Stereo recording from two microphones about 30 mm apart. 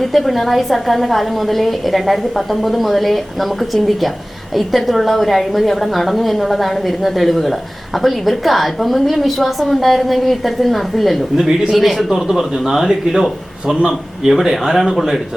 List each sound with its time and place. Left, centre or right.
0.0 s a woman's voice: centre